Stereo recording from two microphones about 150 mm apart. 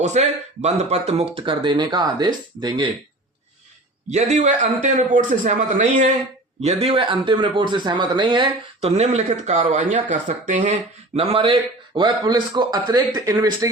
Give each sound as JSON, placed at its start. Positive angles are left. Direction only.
{"t": 0.0, "sound": "speech", "side_deg": -50}
{"t": 4.1, "sound": "a man's voice", "side_deg": -50}
{"t": 9.0, "sound": "speech", "side_deg": -50}